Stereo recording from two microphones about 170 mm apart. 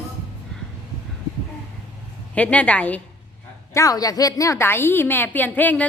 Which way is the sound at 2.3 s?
10° left (ahead or behind).